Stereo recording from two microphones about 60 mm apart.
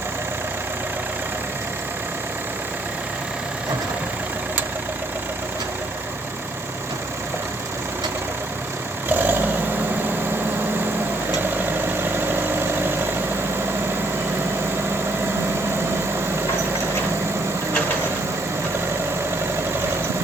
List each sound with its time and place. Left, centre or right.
9.0 s vehicle: right
12.0 s vehicle: right